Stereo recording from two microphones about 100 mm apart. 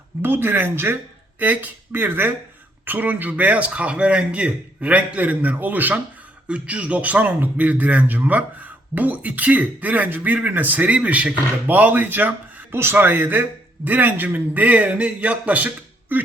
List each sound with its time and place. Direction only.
0.2 s a man's voice: 20° right (ahead or behind)